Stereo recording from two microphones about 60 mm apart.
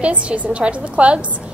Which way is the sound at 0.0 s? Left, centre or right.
Right.